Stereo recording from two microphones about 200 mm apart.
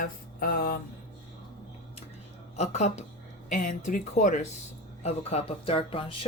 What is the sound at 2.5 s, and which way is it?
Speech, 35° left (ahead or behind).